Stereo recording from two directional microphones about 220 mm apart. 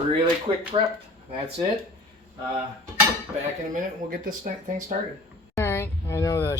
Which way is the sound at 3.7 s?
40° right (ahead or behind).